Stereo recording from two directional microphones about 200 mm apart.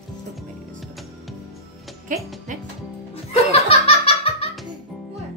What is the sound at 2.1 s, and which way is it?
Speech, 40° right (ahead or behind).